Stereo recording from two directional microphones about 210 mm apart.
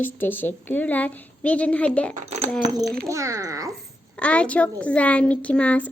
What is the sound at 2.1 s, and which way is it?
Speech, 30° right (ahead or behind).